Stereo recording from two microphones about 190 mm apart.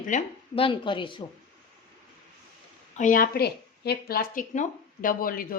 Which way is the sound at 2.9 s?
45° left (ahead or behind).